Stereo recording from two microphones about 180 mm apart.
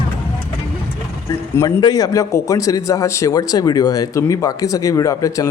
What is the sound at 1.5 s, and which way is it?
A man's voice, 20° left (ahead or behind).